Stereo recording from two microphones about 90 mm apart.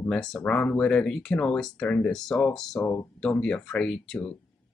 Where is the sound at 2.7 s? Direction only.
25° left (ahead or behind).